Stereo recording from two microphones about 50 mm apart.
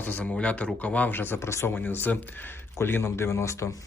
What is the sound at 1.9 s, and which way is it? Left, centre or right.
Speech, left.